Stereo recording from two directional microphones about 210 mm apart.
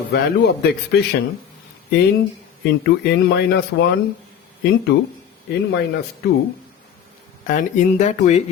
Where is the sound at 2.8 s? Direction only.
55° left (ahead or behind).